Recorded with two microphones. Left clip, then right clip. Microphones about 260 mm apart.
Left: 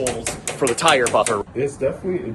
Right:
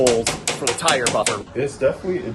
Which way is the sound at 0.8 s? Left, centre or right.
Centre.